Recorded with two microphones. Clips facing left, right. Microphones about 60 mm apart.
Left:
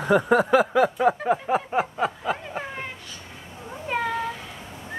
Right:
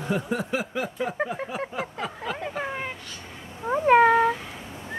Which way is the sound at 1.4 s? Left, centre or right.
Left.